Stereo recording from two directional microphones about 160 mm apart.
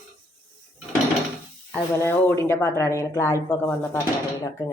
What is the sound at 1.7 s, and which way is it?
Speech, 15° left (ahead or behind).